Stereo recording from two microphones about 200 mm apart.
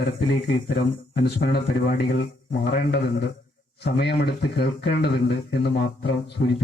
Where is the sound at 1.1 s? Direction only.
55° left (ahead or behind).